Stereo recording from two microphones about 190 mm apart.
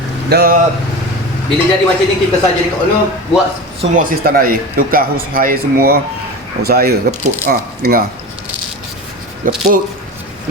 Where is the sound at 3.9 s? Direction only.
50° right (ahead or behind).